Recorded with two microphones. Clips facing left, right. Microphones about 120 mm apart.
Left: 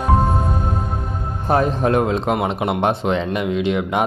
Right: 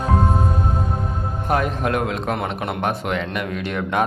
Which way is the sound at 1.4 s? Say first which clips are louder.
Left 4 dB; 30° left (ahead or behind).